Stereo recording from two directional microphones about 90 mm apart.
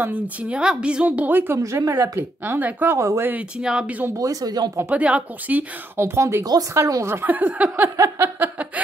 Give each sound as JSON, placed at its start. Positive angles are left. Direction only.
{"t": 0.0, "sound": "a woman's voice", "side_deg": -15}
{"t": 1.6, "sound": "a woman's voice", "side_deg": -35}
{"t": 3.0, "sound": "speech", "side_deg": -35}
{"t": 3.3, "sound": "a woman's voice", "side_deg": -15}
{"t": 4.2, "sound": "speech", "side_deg": -40}
{"t": 4.7, "sound": "a woman's voice", "side_deg": -15}
{"t": 5.9, "sound": "a woman's voice", "side_deg": -30}
{"t": 8.0, "sound": "a sound", "side_deg": -25}
{"t": 8.8, "sound": "chuckle", "side_deg": -15}